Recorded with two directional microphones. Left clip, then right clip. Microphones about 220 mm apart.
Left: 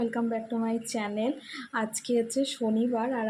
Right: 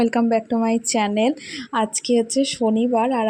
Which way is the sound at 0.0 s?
35° right (ahead or behind).